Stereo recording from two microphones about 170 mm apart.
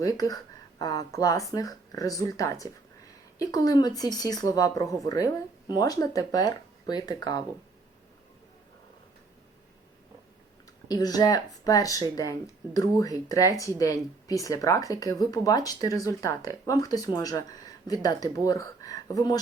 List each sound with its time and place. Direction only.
0.0 s speech: 20° left (ahead or behind)
10.8 s speech: 20° left (ahead or behind)